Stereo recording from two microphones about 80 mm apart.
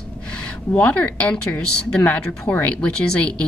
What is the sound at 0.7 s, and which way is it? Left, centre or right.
Speech, centre.